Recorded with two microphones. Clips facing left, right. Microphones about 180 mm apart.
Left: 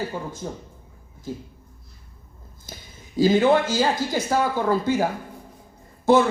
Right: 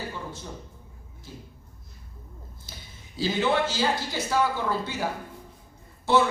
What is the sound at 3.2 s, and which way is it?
A woman's voice, 45° left (ahead or behind).